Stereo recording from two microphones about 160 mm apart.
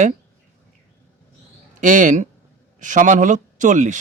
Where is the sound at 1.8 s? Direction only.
55° right (ahead or behind).